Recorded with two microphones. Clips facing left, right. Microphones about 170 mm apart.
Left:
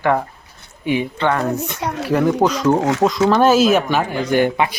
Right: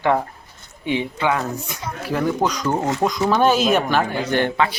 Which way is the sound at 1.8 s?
80° left.